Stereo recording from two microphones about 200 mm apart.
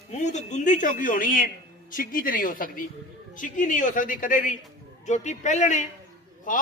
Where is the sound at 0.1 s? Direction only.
35° left (ahead or behind).